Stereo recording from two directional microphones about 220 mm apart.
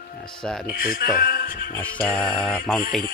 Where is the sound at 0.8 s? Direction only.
40° left (ahead or behind).